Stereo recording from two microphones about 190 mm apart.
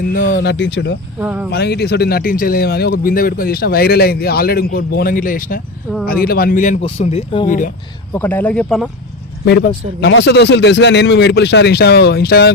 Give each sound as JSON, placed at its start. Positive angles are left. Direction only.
{"t": 0.1, "sound": "speech", "side_deg": 45}
{"t": 1.2, "sound": "speech", "side_deg": -5}
{"t": 1.5, "sound": "speech", "side_deg": 60}
{"t": 6.8, "sound": "speech", "side_deg": 30}
{"t": 8.1, "sound": "speech", "side_deg": 10}
{"t": 9.4, "sound": "speech", "side_deg": 60}